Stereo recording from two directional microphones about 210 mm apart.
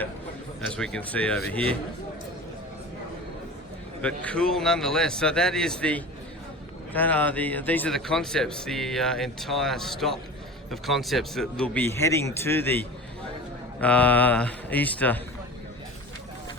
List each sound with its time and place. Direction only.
0.6 s speech: 5° left (ahead or behind)
4.0 s a man's voice: 5° left (ahead or behind)